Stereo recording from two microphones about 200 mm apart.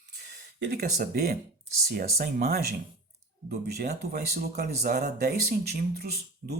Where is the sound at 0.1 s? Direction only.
55° right (ahead or behind).